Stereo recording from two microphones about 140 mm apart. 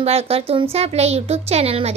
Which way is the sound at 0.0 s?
45° right (ahead or behind).